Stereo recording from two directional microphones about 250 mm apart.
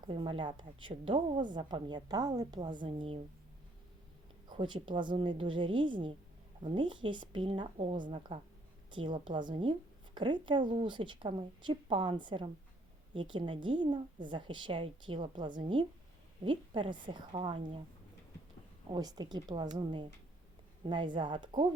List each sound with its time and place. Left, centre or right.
0.1 s a woman's voice: centre
4.4 s a woman's voice: centre
18.9 s a woman's voice: centre